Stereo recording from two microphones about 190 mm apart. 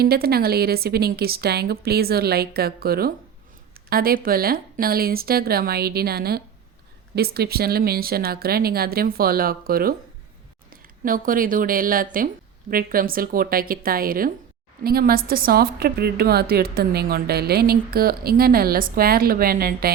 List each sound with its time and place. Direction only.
0.0 s a woman's voice: 55° right (ahead or behind)
11.0 s a woman's voice: 45° right (ahead or behind)